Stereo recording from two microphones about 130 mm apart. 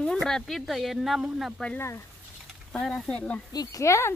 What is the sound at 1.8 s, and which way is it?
Speech, 20° left (ahead or behind).